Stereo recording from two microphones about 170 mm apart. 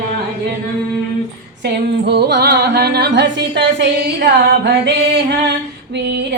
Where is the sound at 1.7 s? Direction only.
75° right (ahead or behind).